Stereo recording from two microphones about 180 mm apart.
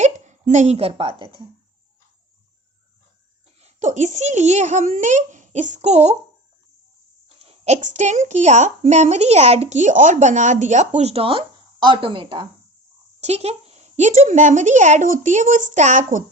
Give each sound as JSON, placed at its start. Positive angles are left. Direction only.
{"t": 0.0, "sound": "speech", "side_deg": -40}
{"t": 3.6, "sound": "a woman's voice", "side_deg": -40}
{"t": 7.3, "sound": "a woman's voice", "side_deg": -35}